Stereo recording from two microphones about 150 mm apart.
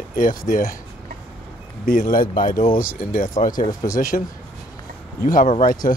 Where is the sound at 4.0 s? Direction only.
65° left (ahead or behind).